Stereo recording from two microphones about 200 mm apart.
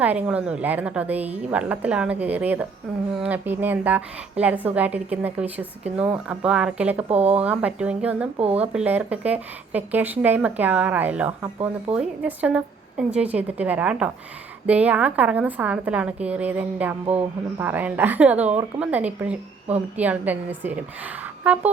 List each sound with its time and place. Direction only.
0.0 s a woman's voice: 5° right (ahead or behind)
7.1 s a woman's voice: 30° right (ahead or behind)
7.3 s a woman's voice: 5° right (ahead or behind)
8.4 s a woman's voice: 30° right (ahead or behind)
8.6 s a woman's voice: 5° right (ahead or behind)